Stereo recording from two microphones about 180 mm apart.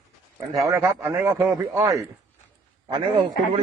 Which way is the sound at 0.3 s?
20° right (ahead or behind).